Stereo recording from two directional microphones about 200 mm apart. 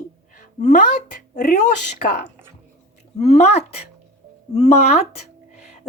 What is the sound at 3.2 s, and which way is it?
A woman's voice, 35° left (ahead or behind).